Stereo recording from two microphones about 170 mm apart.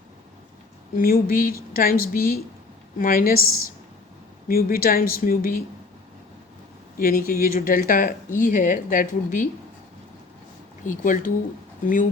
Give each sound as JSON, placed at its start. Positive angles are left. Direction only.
{"t": 0.9, "sound": "a woman's voice", "side_deg": 60}
{"t": 7.0, "sound": "a woman's voice", "side_deg": 55}
{"t": 10.8, "sound": "speech", "side_deg": 50}